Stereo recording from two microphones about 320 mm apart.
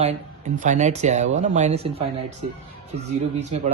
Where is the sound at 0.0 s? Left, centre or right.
Right.